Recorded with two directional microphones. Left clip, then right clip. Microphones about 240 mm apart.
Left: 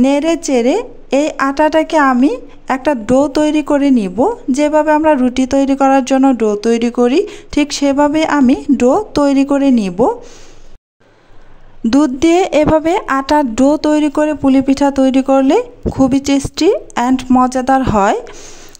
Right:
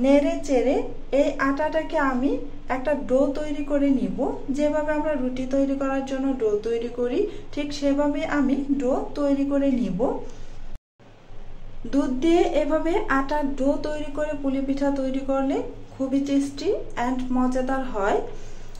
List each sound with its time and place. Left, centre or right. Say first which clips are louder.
0.0 s a woman's voice: left 7 dB; left
11.9 s a woman's voice: left 10 dB; left